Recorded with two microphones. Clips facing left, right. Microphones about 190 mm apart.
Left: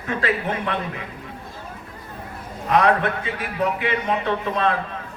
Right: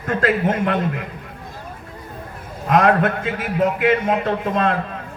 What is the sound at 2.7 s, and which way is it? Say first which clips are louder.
A man's voice: right 3 dB; 50° right (ahead or behind).